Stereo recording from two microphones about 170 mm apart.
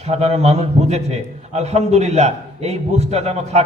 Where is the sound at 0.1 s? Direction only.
40° right (ahead or behind).